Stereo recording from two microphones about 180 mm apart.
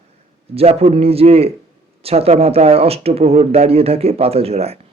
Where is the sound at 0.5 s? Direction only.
35° right (ahead or behind).